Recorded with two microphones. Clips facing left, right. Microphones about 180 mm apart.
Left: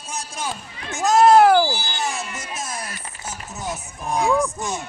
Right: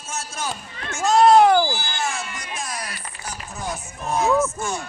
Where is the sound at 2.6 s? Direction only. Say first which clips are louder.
Even; 25° left (ahead or behind).